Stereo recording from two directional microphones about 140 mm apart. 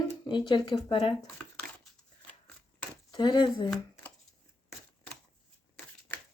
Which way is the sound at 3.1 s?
30° left (ahead or behind).